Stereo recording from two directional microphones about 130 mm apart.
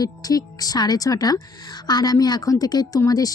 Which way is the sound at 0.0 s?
30° left (ahead or behind).